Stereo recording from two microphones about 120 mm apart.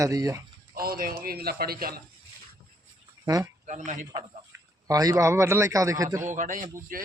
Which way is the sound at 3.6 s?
85° right.